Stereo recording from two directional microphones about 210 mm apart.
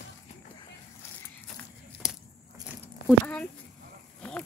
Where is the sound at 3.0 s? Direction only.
50° left (ahead or behind).